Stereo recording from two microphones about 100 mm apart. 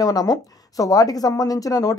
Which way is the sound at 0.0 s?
40° left (ahead or behind).